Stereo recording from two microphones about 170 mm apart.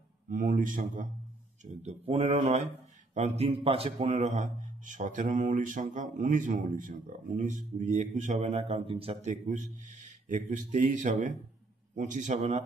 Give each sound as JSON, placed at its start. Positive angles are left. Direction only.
{"t": 0.3, "sound": "speech", "side_deg": -50}